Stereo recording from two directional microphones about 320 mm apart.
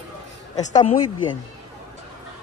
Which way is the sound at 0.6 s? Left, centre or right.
Centre.